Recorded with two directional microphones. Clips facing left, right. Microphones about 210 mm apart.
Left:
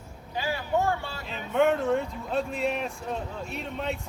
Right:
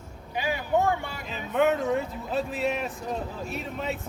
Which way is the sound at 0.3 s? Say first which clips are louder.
Right 2 dB; 15° right (ahead or behind).